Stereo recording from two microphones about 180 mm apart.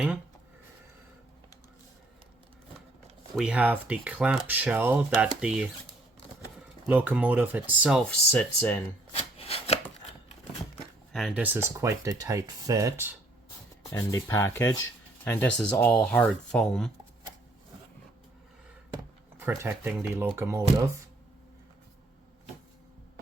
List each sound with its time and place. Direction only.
3.3 s speech: 5° right (ahead or behind)
6.8 s speech: 10° right (ahead or behind); by 8.8 s 5° left (ahead or behind)
9.1 s chopping: 35° left (ahead or behind)
11.1 s speech: centre (ahead or behind)
13.9 s speech: 15° left (ahead or behind)
19.4 s speech: 10° right (ahead or behind)